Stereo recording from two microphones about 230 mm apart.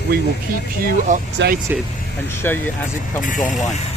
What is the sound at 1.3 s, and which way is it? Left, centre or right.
Speech, right.